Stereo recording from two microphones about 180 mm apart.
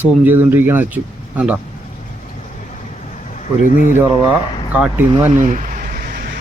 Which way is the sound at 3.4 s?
45° left (ahead or behind).